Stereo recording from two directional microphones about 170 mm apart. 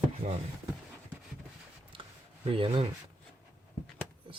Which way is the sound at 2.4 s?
30° right (ahead or behind).